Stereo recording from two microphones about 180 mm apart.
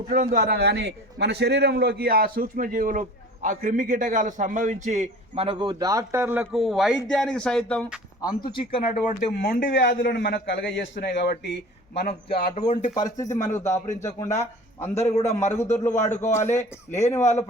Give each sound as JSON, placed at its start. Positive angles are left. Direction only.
{"t": 0.1, "sound": "a man's voice", "side_deg": -50}
{"t": 8.2, "sound": "speech", "side_deg": 20}
{"t": 9.3, "sound": "speech", "side_deg": 85}
{"t": 10.0, "sound": "a man's voice", "side_deg": 55}
{"t": 12.5, "sound": "speech", "side_deg": 50}
{"t": 13.6, "sound": "a man's voice", "side_deg": 15}
{"t": 14.9, "sound": "a man's voice", "side_deg": 35}
{"t": 15.5, "sound": "a man's voice", "side_deg": 15}